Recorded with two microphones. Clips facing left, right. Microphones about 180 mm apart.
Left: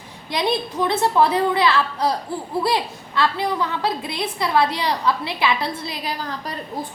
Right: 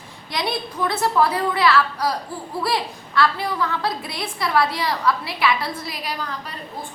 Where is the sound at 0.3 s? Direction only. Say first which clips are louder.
Left 4 dB; 20° left (ahead or behind).